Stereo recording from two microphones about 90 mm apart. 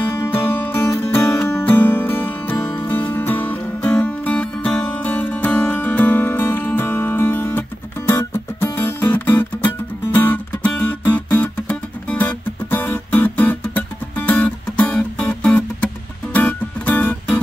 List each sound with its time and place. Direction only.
0.0 s music: 25° left (ahead or behind)